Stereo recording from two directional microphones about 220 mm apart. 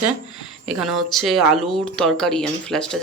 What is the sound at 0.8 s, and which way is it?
Speech, centre (ahead or behind).